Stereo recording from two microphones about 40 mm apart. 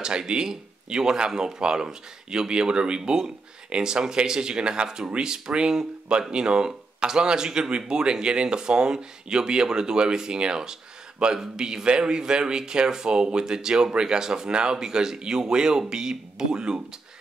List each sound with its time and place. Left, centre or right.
0.0 s speech: right